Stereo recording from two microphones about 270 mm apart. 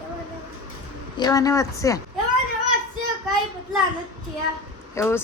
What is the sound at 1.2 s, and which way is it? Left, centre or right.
Speech, centre.